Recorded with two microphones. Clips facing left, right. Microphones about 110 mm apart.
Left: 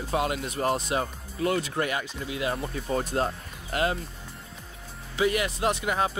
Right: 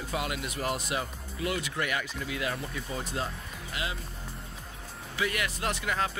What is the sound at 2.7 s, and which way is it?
Speech, 45° left (ahead or behind).